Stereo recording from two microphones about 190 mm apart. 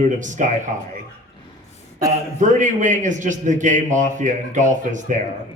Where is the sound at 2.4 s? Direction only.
40° right (ahead or behind).